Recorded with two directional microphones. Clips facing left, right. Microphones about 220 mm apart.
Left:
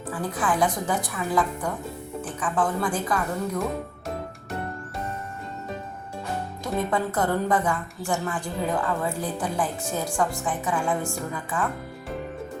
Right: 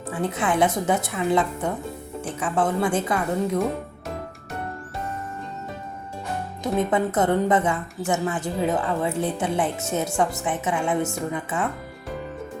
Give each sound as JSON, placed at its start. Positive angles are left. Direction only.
{"t": 0.1, "sound": "a woman's voice", "side_deg": -25}
{"t": 6.6, "sound": "a woman's voice", "side_deg": -20}